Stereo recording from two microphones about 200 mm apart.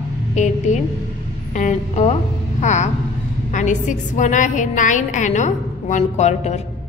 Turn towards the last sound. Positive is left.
turn(degrees=35)  # may be behind; listen again after turning